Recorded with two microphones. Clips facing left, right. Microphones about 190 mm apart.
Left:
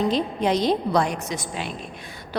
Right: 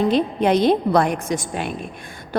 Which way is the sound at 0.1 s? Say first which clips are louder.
Right 5 dB; 60° right (ahead or behind).